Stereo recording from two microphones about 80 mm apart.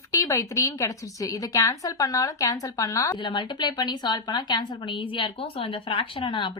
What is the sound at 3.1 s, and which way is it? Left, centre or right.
A woman's voice, left.